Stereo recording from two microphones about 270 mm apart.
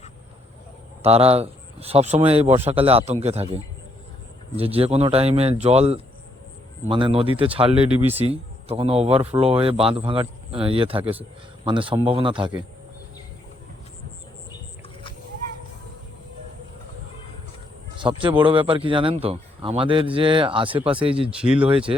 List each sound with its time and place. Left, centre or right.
1.0 s speech: right
7.9 s speech: centre
8.2 s speech: right
18.0 s speech: centre
21.4 s speech: centre
21.7 s speech: centre